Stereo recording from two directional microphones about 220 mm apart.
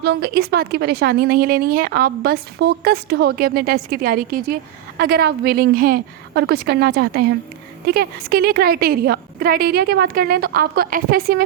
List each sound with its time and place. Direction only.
0.0 s a woman's voice: 45° right (ahead or behind)